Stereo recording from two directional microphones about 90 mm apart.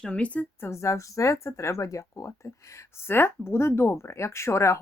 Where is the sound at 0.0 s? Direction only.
15° left (ahead or behind).